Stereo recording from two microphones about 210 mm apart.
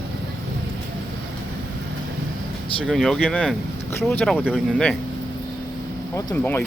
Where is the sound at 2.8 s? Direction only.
Centre (ahead or behind).